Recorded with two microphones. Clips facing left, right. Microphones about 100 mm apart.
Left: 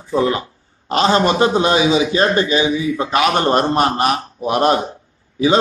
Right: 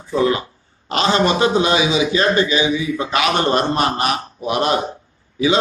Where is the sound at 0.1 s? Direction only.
35° left (ahead or behind).